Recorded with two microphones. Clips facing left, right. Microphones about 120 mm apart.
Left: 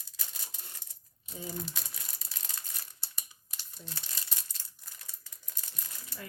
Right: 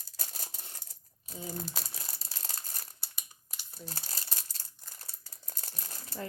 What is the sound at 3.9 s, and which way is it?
Crumpling, 40° right (ahead or behind).